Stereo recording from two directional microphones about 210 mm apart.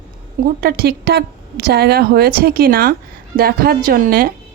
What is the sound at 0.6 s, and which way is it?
Speech, 45° right (ahead or behind).